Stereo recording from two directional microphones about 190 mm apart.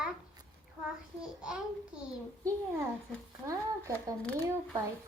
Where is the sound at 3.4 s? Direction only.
15° right (ahead or behind).